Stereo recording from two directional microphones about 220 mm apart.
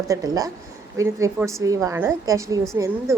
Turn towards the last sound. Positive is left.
turn(degrees=-15)  # may be behind; listen again after turning